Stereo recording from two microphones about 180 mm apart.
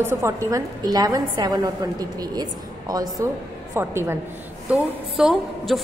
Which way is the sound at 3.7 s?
15° right (ahead or behind).